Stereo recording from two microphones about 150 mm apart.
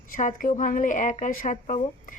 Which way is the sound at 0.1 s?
60° left (ahead or behind).